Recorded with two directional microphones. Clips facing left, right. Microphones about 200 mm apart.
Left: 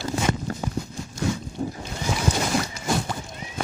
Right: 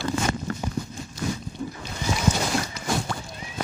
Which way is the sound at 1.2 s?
45° left (ahead or behind).